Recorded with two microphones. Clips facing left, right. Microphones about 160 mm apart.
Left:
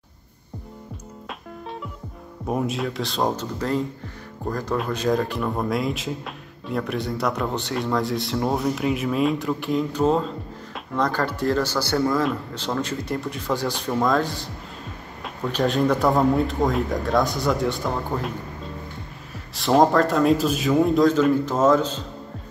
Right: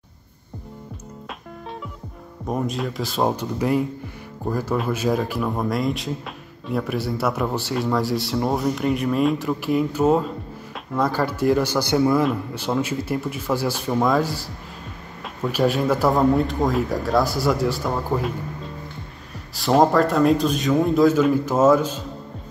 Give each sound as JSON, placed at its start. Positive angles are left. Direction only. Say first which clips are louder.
{"t": 2.4, "sound": "a man's voice", "louder": "even", "side_deg": 5}
{"t": 15.5, "sound": "a man's voice", "louder": "right 1 dB", "side_deg": -5}